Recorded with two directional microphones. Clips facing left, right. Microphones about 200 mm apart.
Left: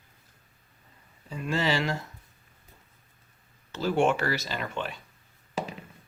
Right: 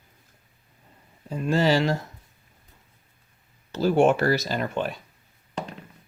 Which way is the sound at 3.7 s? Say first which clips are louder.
Right 5 dB; 40° right (ahead or behind).